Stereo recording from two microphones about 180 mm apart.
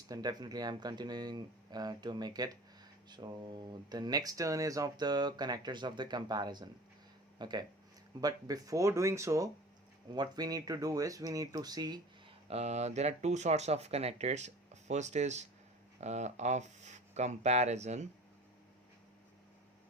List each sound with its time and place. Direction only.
0.1 s speech: 20° right (ahead or behind)
12.5 s speech: 35° right (ahead or behind)